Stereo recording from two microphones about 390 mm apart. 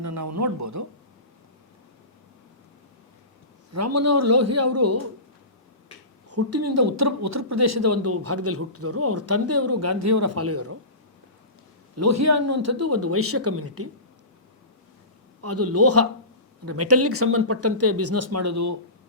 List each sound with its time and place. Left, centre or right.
0.0 s speech: right
3.8 s speech: right
6.3 s speech: right
11.9 s speech: right
15.4 s speech: right